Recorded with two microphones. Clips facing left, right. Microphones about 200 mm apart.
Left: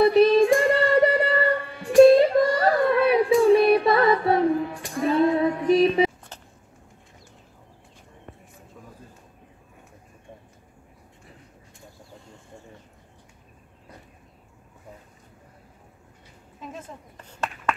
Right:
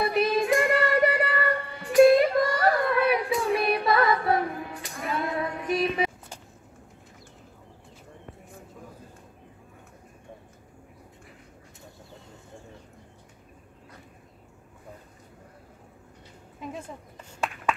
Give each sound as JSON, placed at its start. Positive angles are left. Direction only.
{"t": 0.0, "sound": "child singing", "side_deg": 30}
{"t": 2.0, "sound": "female singing", "side_deg": 30}